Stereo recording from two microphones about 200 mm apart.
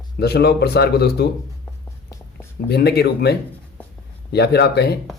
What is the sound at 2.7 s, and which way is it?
Speech, 55° left (ahead or behind).